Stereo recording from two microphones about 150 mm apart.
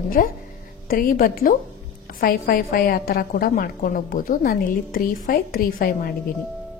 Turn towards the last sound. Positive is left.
turn(degrees=80)